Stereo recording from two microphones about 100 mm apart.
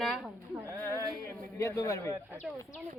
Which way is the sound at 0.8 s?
25° left (ahead or behind).